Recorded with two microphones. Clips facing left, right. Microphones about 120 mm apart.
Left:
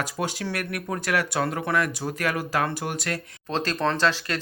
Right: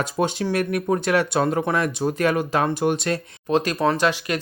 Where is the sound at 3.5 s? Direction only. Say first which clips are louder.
Right 5 dB; 15° right (ahead or behind).